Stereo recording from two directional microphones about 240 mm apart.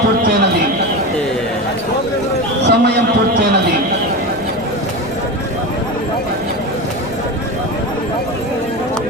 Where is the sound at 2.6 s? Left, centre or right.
Right.